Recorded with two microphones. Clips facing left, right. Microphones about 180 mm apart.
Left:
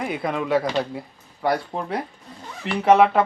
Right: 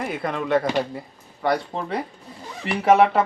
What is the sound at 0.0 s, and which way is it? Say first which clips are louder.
Speech: left 1 dB; centre (ahead or behind).